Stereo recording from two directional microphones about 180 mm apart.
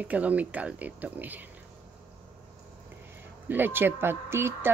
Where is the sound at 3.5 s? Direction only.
10° right (ahead or behind).